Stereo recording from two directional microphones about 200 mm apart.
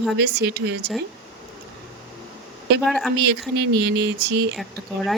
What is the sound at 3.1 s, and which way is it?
Speech, 55° right (ahead or behind).